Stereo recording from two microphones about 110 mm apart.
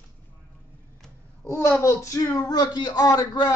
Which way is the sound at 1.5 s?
25° left (ahead or behind).